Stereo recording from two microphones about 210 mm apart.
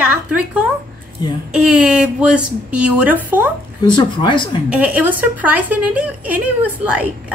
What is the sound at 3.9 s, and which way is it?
Speech, 20° left (ahead or behind).